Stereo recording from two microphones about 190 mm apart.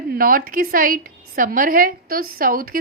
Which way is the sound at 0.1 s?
50° right (ahead or behind).